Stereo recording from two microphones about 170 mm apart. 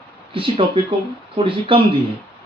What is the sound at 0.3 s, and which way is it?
Speech, 30° right (ahead or behind).